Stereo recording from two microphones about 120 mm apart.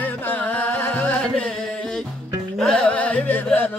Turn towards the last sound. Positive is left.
turn(degrees=15)  # may be behind; listen again after turning